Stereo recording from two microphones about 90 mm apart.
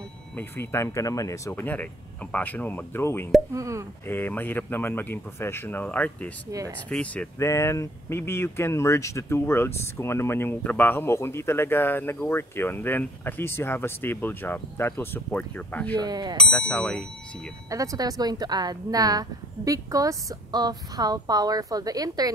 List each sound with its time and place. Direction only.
0.4 s speech: 25° left (ahead or behind)
1.5 s speech: 20° left (ahead or behind)
3.5 s speech: 35° right (ahead or behind)
4.0 s speech: 25° left (ahead or behind)
7.3 s speech: 35° left (ahead or behind); by 16.0 s 20° left (ahead or behind)
16.0 s a woman's voice: 50° right (ahead or behind)
16.3 s speech: 10° left (ahead or behind)
17.6 s a woman's voice: 40° right (ahead or behind)